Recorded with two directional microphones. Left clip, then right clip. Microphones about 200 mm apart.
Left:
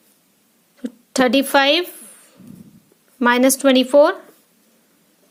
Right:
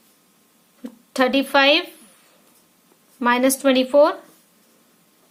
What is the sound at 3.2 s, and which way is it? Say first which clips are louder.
Speech: left 3 dB; 30° left (ahead or behind).